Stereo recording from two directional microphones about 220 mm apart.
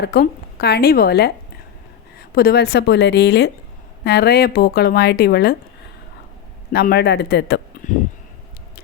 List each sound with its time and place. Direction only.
0.0 s a woman's voice: 45° left (ahead or behind)
6.7 s a woman's voice: 40° left (ahead or behind)